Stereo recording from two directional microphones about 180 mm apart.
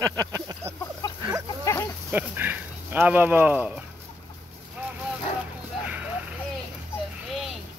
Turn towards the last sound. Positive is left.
turn(degrees=0)  # may be behind; listen again after turning